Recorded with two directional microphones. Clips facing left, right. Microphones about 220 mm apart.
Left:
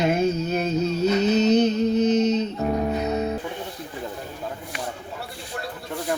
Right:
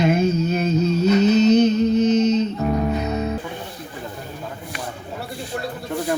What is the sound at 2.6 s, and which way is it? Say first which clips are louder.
Music: right 2 dB; 25° left (ahead or behind).